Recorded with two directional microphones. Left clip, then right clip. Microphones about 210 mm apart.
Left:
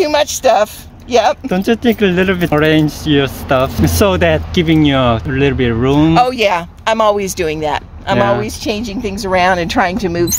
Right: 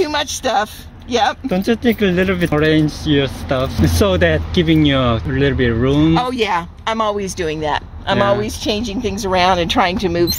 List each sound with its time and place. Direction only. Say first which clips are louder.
0.0 s speech: left 6 dB; 50° left (ahead or behind)
1.5 s speech: left 3 dB; 15° left (ahead or behind)
6.1 s speech: left 5 dB; 50° left (ahead or behind); by 8.7 s 15° left (ahead or behind)
8.7 s a woman's voice: even; 60° left (ahead or behind)
9.2 s speech: left 2 dB; 20° left (ahead or behind)